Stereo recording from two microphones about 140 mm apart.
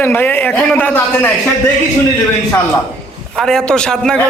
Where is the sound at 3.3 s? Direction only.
5° left (ahead or behind).